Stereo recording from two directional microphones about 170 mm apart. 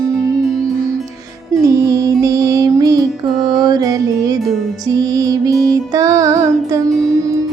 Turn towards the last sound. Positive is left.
turn(degrees=-20)  # may be behind; listen again after turning